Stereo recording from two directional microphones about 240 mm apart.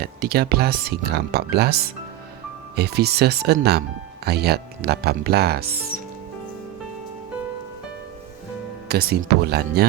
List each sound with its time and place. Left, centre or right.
0.0 s speech: right
8.9 s speech: right